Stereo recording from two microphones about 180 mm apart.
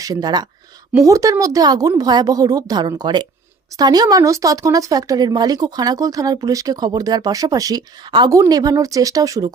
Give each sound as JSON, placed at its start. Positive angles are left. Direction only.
{"t": 0.0, "sound": "speech", "side_deg": -20}